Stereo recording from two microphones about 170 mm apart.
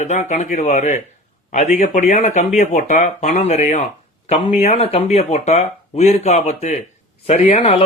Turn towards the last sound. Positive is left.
turn(degrees=35)  # may be behind; listen again after turning